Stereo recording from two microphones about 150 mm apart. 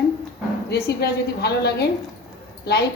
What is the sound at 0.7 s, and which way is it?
A woman's voice, 90° left.